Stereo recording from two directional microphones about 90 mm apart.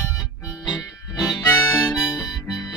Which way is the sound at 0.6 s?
45° left (ahead or behind).